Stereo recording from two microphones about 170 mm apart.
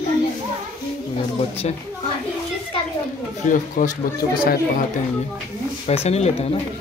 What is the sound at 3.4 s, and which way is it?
Speech, 50° left (ahead or behind).